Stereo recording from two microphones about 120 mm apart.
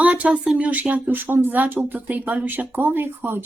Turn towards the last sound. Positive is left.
turn(degrees=-15)  # may be behind; listen again after turning